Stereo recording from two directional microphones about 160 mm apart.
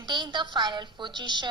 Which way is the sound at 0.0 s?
25° right (ahead or behind).